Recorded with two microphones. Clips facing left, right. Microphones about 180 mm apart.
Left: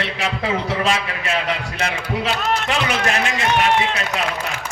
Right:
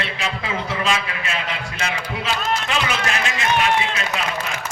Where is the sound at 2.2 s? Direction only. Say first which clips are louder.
Left 2 dB; 65° left (ahead or behind).